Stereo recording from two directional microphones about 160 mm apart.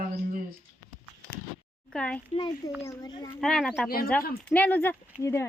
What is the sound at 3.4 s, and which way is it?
Speech, 5° left (ahead or behind).